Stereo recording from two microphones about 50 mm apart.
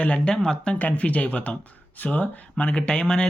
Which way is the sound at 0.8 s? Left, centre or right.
Left.